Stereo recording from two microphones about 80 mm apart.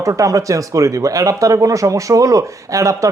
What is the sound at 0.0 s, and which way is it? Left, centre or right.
Speech, right.